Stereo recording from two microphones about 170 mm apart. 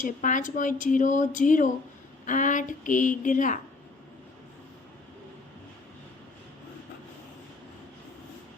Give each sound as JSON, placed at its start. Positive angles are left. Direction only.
{"t": 0.0, "sound": "speech", "side_deg": 50}